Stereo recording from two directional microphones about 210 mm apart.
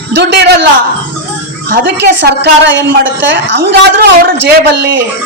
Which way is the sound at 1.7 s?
55° right (ahead or behind).